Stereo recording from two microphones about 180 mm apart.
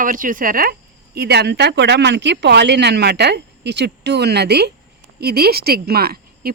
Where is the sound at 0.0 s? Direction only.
50° right (ahead or behind).